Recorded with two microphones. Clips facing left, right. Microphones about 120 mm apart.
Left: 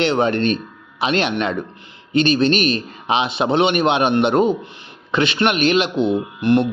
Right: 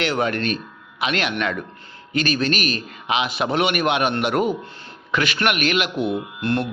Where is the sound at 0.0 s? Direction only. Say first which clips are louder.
Left 5 dB; 30° left (ahead or behind).